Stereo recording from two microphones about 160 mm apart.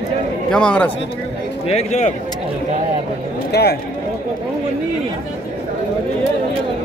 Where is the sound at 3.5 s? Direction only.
90° left.